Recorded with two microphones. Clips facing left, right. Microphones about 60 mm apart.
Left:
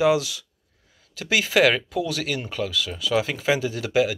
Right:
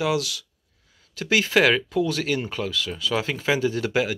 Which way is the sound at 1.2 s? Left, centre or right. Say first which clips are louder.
Even; centre.